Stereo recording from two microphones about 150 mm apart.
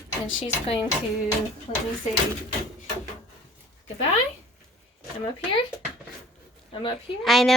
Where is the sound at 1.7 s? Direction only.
50° left (ahead or behind).